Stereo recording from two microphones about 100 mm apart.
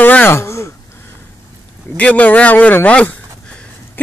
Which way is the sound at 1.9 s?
15° left (ahead or behind).